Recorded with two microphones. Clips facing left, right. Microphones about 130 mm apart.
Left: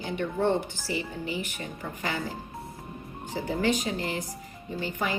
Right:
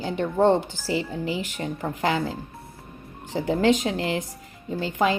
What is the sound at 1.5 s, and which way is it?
Speech, 75° right (ahead or behind).